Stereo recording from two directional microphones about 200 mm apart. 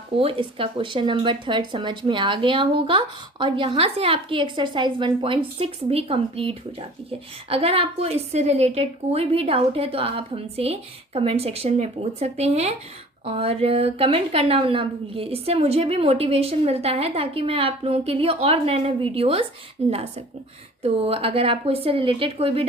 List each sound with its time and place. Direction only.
0.2 s a woman's voice: 30° right (ahead or behind)